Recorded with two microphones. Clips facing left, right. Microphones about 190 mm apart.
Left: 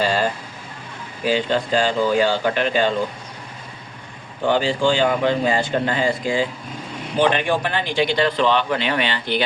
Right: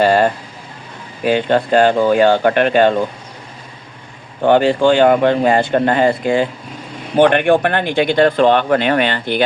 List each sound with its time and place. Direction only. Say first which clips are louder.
0.0 s speech: right 8 dB; 55° right (ahead or behind)
4.4 s speech: right 7 dB; 60° right (ahead or behind)